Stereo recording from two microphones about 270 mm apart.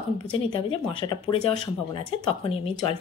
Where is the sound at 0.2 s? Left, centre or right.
Centre.